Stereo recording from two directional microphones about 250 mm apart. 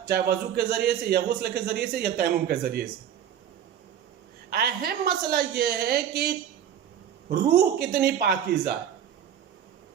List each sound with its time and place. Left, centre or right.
0.1 s a man's voice: right
4.4 s a man's voice: right
7.8 s a man's voice: right